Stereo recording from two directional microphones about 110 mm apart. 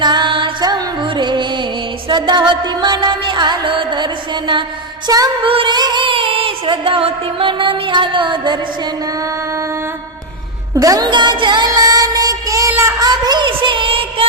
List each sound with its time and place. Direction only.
0.0 s music: 45° right (ahead or behind)
5.0 s music: 35° right (ahead or behind)
5.5 s music: 50° right (ahead or behind)
10.8 s music: 35° right (ahead or behind)
13.1 s a sound: 40° right (ahead or behind); by 14.3 s 55° right (ahead or behind)